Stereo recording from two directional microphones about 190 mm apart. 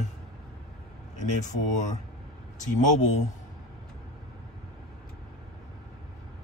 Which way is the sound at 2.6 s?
40° left (ahead or behind).